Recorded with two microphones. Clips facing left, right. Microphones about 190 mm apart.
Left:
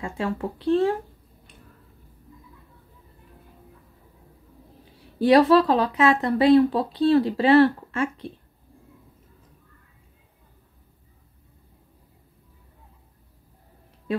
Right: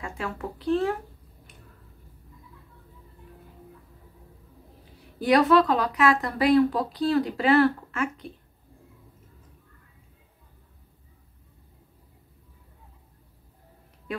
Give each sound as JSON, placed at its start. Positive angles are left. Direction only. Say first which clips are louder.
{"t": 0.0, "sound": "speech", "louder": "left 5 dB", "side_deg": 30}
{"t": 5.2, "sound": "speech", "louder": "left 3 dB", "side_deg": 30}